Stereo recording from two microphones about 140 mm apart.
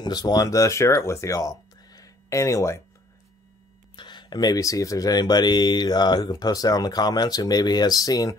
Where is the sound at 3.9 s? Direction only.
35° left (ahead or behind).